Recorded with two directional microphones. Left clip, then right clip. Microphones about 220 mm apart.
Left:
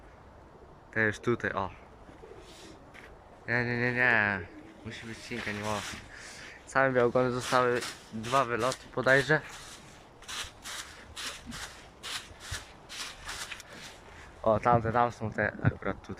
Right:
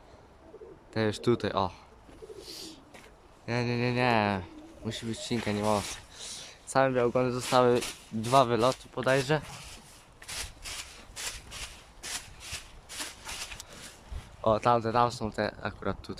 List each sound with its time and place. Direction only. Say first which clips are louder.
0.9 s speech: even; 10° right (ahead or behind)
3.4 s speech: left 2 dB; 10° right (ahead or behind)
7.6 s speech: right 3 dB; 15° right (ahead or behind)
10.6 s rub: even; 5° right (ahead or behind)
11.2 s a sound: even; 30° right (ahead or behind)
12.4 s a sound: even; 10° right (ahead or behind)
14.4 s speech: even; 10° right (ahead or behind)